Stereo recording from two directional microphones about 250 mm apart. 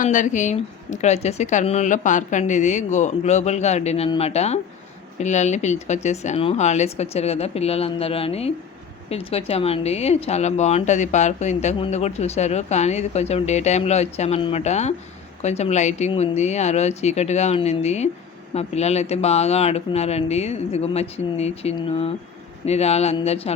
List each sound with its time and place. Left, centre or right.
0.0 s speech: left